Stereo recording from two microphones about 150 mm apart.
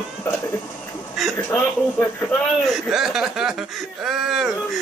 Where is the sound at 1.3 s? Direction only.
15° left (ahead or behind).